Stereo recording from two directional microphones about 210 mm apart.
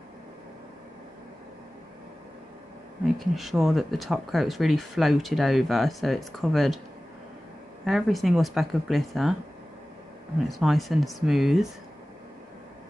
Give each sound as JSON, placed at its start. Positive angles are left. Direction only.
{"t": 3.2, "sound": "speech", "side_deg": 0}
{"t": 7.8, "sound": "speech", "side_deg": 0}
{"t": 10.5, "sound": "speech", "side_deg": 0}